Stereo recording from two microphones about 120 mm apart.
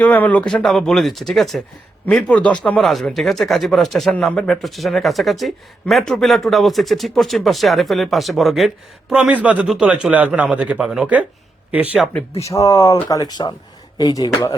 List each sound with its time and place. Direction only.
0.0 s speech: 10° left (ahead or behind); by 11.9 s 10° right (ahead or behind)
12.4 s speech: 25° left (ahead or behind)